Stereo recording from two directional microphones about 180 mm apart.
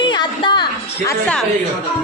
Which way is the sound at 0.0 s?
25° left (ahead or behind).